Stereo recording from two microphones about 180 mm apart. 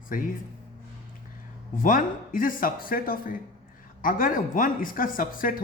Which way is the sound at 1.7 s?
50° left (ahead or behind).